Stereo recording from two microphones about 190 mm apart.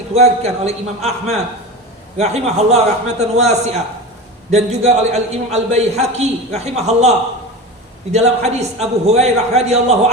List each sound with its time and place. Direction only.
0.1 s a man's voice: 35° right (ahead or behind)
8.1 s a man's voice: 35° right (ahead or behind)